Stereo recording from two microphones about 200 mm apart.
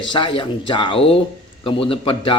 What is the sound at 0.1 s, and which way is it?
A man's voice, 25° left (ahead or behind).